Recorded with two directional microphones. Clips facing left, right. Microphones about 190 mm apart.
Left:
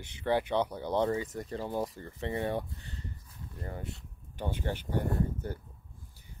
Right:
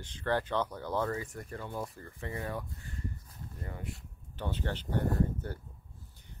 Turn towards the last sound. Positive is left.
turn(degrees=10)  # may be behind; listen again after turning